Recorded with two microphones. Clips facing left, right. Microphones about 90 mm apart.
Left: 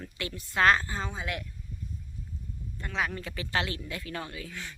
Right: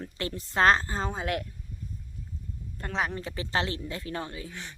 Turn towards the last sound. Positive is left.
turn(degrees=-25)  # may be behind; listen again after turning